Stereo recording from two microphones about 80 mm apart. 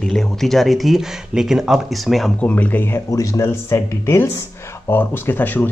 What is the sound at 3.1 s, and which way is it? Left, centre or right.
Speech, left.